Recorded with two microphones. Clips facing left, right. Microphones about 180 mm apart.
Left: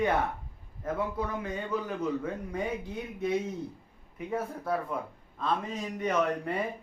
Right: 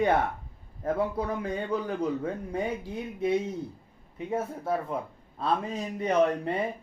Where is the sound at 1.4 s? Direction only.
35° right (ahead or behind).